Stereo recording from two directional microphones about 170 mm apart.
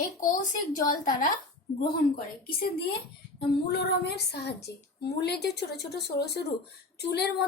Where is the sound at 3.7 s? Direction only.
75° left (ahead or behind).